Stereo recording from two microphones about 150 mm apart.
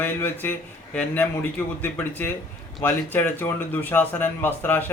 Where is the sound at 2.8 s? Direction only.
15° left (ahead or behind).